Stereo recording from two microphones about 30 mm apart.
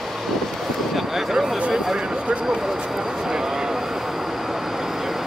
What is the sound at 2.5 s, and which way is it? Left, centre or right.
Speech, centre.